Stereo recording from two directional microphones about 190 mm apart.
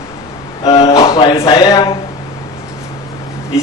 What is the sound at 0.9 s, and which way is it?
Speech, 20° left (ahead or behind).